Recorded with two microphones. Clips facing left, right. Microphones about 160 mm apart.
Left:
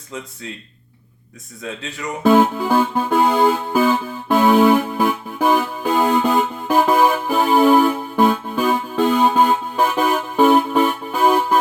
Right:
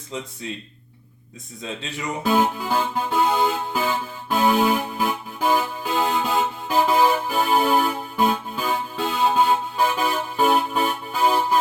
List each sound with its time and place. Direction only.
2.2 s music: 55° left (ahead or behind)